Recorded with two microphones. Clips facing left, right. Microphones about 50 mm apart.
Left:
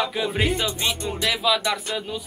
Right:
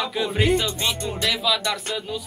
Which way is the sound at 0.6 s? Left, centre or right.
Centre.